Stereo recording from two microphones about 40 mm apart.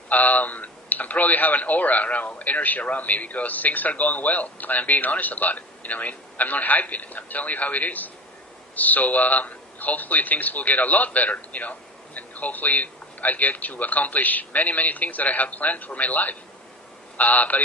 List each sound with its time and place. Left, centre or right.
0.1 s speech: left